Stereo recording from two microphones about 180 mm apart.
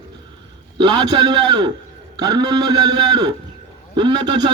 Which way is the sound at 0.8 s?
25° right (ahead or behind).